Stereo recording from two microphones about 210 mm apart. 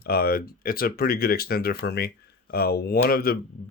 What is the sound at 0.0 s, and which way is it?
Speech, 45° left (ahead or behind).